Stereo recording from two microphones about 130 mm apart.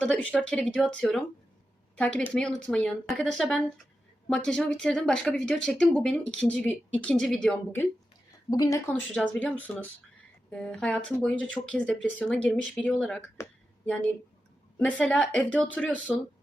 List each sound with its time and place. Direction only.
0.0 s speech: 10° left (ahead or behind)
8.4 s a woman's voice: 30° left (ahead or behind)
9.1 s speech: 5° left (ahead or behind)